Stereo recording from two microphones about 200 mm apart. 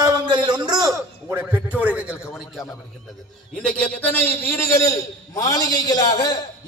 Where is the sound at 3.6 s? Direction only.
5° left (ahead or behind).